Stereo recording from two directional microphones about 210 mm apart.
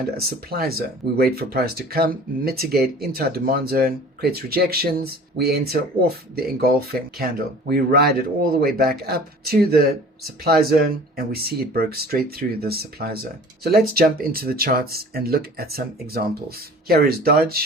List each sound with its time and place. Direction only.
0.3 s speech: 45° right (ahead or behind)